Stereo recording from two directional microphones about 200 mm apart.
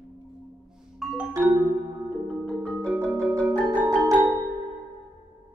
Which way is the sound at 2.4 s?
5° left (ahead or behind).